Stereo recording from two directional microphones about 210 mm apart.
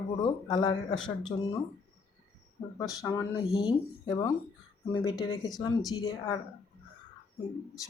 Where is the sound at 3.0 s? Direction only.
15° left (ahead or behind).